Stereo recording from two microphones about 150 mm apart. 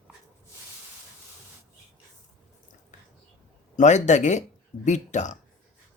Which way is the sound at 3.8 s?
50° left (ahead or behind).